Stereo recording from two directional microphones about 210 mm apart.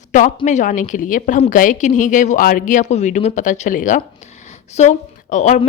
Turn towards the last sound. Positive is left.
turn(degrees=35)  # may be behind; listen again after turning